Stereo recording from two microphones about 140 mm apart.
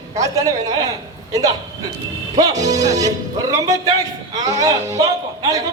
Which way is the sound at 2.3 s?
25° right (ahead or behind).